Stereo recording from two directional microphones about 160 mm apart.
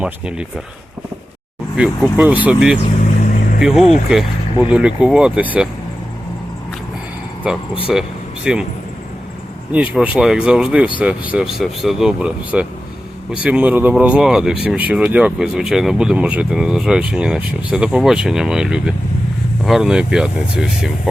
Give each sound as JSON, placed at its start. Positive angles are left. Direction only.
{"t": 0.0, "sound": "speech", "side_deg": -5}
{"t": 1.7, "sound": "speech", "side_deg": -5}
{"t": 2.8, "sound": "vehicle", "side_deg": 50}
{"t": 3.6, "sound": "speech", "side_deg": 0}
{"t": 7.9, "sound": "speech", "side_deg": -5}
{"t": 9.7, "sound": "speech", "side_deg": -10}